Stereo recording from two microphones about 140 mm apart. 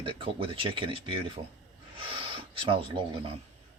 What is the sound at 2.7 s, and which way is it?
Speech, 40° right (ahead or behind).